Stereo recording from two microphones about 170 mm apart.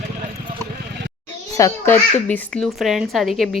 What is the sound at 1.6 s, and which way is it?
Speech, 20° left (ahead or behind).